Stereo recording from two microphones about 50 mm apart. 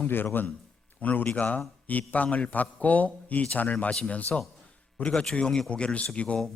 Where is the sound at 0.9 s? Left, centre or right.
Left.